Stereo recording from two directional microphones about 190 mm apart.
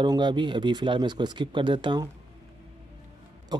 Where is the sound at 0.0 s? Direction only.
25° right (ahead or behind).